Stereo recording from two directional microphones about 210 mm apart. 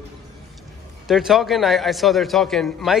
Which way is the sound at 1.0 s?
Centre (ahead or behind).